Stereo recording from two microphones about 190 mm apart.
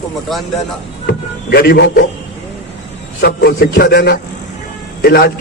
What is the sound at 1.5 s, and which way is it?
Speech, 55° left (ahead or behind).